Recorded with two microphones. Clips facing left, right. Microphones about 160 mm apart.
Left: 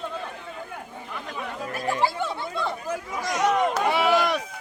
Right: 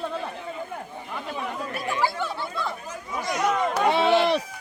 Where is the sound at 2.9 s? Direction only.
85° left.